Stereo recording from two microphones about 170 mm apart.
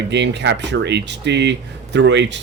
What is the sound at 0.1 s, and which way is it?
Speech, 90° right.